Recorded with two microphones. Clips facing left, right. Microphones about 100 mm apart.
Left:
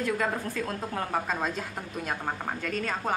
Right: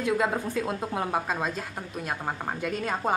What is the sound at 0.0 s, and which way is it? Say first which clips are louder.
A woman's voice: right 3 dB; 15° right (ahead or behind).